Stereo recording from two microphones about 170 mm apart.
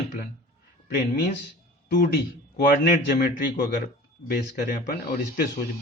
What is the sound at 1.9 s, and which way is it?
A man's voice, 60° left (ahead or behind).